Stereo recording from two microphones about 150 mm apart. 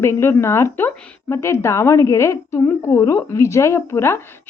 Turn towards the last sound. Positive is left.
turn(degrees=15)  # may be behind; listen again after turning